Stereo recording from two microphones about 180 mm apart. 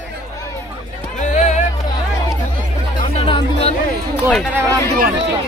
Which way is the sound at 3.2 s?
30° left (ahead or behind).